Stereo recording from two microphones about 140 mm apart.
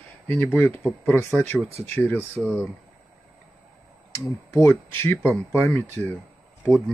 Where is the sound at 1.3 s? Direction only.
5° left (ahead or behind).